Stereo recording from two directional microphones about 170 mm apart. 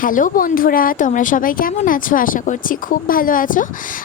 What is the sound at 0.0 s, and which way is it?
A woman's voice, 50° left (ahead or behind).